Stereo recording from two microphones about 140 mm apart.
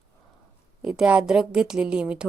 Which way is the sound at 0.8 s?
5° right (ahead or behind).